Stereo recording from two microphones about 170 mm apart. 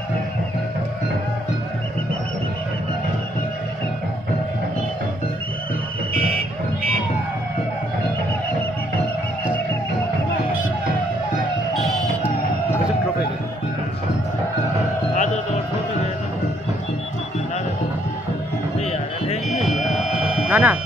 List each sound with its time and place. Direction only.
11.7 s music: centre (ahead or behind)
15.1 s music: 45° left (ahead or behind)
18.9 s music: 40° left (ahead or behind)
19.8 s sheep: centre (ahead or behind)